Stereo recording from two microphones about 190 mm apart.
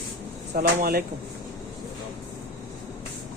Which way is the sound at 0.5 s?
50° right (ahead or behind).